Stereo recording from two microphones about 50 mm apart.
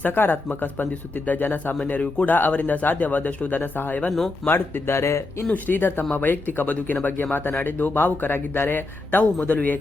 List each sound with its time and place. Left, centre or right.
0.0 s a man's voice: left
5.6 s a man's voice: left